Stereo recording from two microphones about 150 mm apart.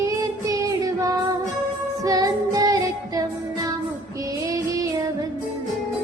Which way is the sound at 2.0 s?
25° right (ahead or behind).